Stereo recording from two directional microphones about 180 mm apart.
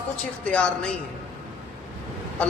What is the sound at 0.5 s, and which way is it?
Speech, 5° left (ahead or behind).